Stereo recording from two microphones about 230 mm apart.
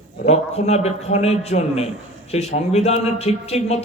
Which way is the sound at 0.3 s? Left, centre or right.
Left.